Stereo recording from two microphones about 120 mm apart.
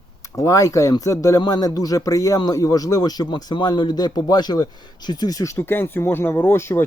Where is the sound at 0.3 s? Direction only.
25° left (ahead or behind).